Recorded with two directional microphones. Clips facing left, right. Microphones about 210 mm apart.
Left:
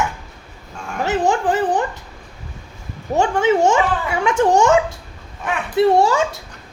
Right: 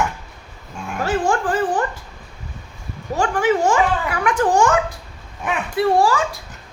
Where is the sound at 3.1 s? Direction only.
25° left (ahead or behind).